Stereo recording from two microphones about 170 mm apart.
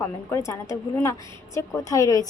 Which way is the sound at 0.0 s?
15° left (ahead or behind).